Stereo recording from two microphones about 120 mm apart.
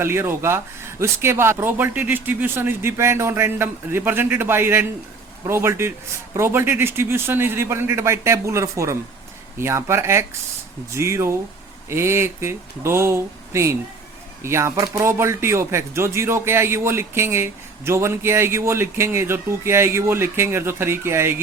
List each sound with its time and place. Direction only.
0.0 s speech: 20° right (ahead or behind)